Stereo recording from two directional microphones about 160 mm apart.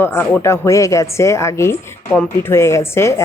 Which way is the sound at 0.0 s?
15° left (ahead or behind).